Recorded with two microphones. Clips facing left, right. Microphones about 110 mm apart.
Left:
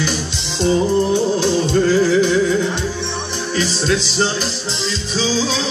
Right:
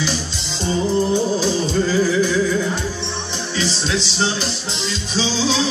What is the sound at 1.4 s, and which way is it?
Music, 65° left (ahead or behind).